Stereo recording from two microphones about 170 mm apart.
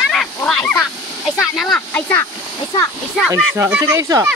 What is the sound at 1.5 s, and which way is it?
Speech, 5° left (ahead or behind).